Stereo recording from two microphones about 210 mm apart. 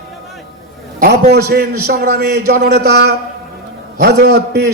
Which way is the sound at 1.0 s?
45° right (ahead or behind).